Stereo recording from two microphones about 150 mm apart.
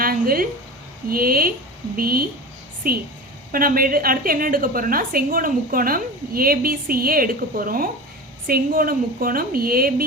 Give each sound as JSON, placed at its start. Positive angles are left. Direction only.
{"t": 0.0, "sound": "a woman's voice", "side_deg": -75}